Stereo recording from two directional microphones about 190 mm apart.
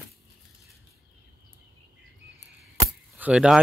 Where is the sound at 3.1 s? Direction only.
5° right (ahead or behind).